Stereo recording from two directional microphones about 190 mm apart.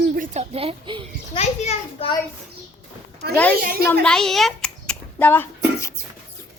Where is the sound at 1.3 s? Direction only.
35° left (ahead or behind).